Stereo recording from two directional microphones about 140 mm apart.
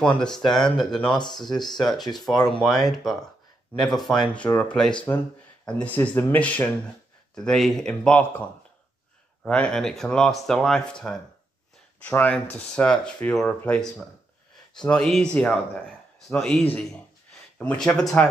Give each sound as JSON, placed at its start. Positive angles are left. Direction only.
{"t": 0.0, "sound": "speech", "side_deg": 5}
{"t": 1.5, "sound": "speech", "side_deg": 30}
{"t": 1.8, "sound": "speech", "side_deg": 0}